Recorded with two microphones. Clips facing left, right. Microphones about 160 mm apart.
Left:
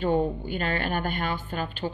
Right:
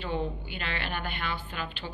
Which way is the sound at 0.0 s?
45° left (ahead or behind).